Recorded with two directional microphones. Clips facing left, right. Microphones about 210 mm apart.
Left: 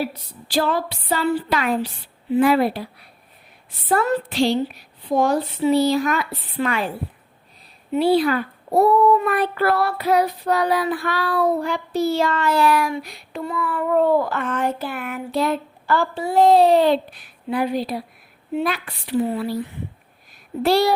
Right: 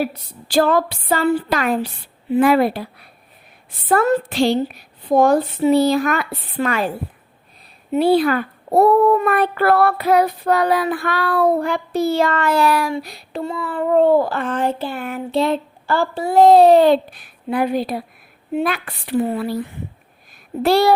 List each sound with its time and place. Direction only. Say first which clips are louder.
0.0 s a child's voice: right 3 dB; 50° right (ahead or behind)
3.8 s a child's voice: right 4 dB; 50° right (ahead or behind)
7.9 s a child's voice: right 2 dB; 50° right (ahead or behind); by 16.2 s 30° right (ahead or behind)
16.2 s a child's voice: right 4 dB; 45° right (ahead or behind)
20.6 s speech: right 3 dB; 55° right (ahead or behind)